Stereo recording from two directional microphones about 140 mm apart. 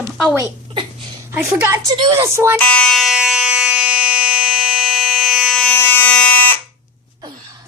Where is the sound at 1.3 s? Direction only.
20° right (ahead or behind).